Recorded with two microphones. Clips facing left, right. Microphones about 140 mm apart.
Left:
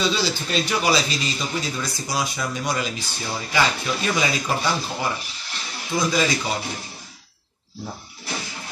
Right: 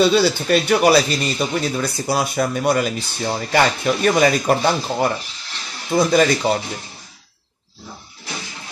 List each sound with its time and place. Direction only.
0.0 s speech: 55° right (ahead or behind)